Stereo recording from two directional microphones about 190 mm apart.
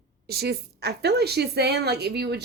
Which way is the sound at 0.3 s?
55° right (ahead or behind).